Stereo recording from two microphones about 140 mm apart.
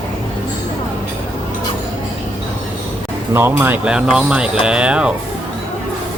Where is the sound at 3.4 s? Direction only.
15° right (ahead or behind).